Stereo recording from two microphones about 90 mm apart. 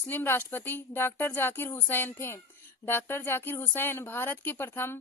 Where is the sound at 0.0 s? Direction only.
20° left (ahead or behind).